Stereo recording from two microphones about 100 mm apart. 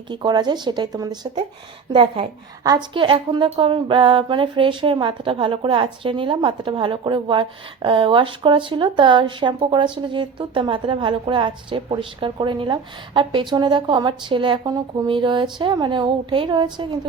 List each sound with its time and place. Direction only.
0.1 s speech: 50° right (ahead or behind)
1.9 s a woman's voice: 60° right (ahead or behind)
14.7 s speech: 40° right (ahead or behind)
15.1 s speech: 50° right (ahead or behind)